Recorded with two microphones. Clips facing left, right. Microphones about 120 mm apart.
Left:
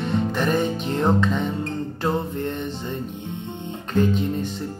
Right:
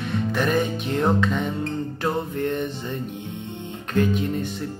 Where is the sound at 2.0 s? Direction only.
15° left (ahead or behind).